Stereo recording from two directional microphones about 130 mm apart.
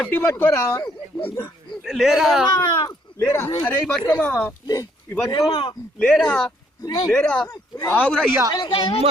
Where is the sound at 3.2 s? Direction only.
20° left (ahead or behind).